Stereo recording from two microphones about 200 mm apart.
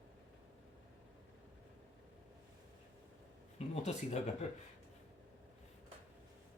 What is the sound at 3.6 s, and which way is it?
Speech, 30° left (ahead or behind).